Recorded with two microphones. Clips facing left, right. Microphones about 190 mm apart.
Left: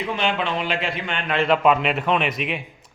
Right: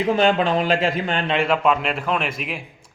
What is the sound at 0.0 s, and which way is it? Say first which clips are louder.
Speech: right 6 dB; 40° right (ahead or behind).